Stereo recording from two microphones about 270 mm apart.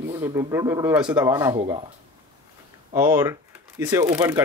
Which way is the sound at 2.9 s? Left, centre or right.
Centre.